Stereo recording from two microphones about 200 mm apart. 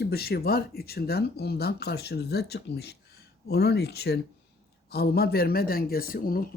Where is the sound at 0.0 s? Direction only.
50° left (ahead or behind).